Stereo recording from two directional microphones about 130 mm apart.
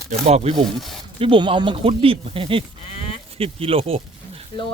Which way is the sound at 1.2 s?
40° right (ahead or behind).